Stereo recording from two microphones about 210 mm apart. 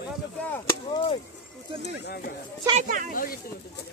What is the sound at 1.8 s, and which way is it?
Speech, 50° left (ahead or behind).